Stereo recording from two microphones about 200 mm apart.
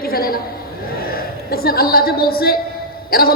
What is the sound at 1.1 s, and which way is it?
A woman's voice, 50° left (ahead or behind).